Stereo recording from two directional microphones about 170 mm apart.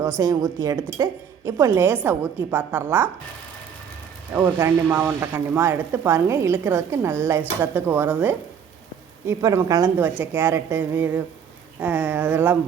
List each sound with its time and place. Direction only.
0.2 s speech: 20° right (ahead or behind)
4.4 s a woman's voice: 15° right (ahead or behind)